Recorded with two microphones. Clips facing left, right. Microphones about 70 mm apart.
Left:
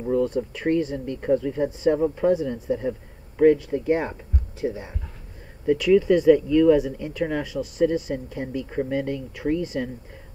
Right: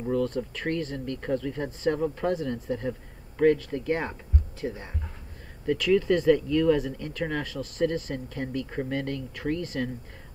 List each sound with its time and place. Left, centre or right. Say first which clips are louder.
0.1 s speech: left 5 dB; centre
8.6 s speech: left 5 dB; centre
8.9 s speech: left 4 dB; centre